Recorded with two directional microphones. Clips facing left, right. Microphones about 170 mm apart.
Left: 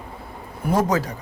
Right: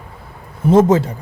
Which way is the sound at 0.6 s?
25° right (ahead or behind).